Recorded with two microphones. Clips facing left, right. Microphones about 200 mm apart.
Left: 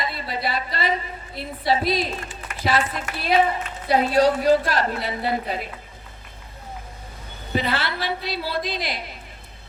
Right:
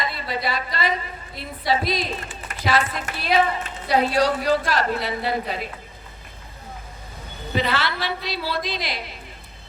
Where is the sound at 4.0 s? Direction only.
45° left (ahead or behind).